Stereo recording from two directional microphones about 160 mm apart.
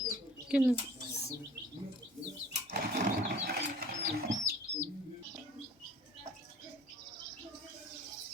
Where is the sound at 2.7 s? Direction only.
65° right (ahead or behind).